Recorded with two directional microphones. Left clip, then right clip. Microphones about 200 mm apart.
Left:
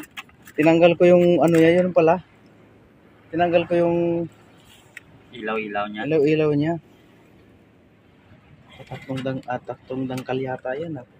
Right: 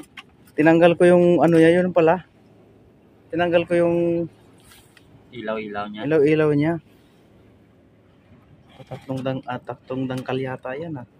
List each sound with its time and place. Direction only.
0.6 s speech: 15° right (ahead or behind)
3.3 s speech: 10° right (ahead or behind)
5.3 s speech: 20° right (ahead or behind)
8.8 s speech: 15° right (ahead or behind)